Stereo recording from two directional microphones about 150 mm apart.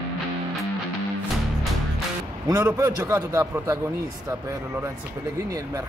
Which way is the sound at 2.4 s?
20° right (ahead or behind).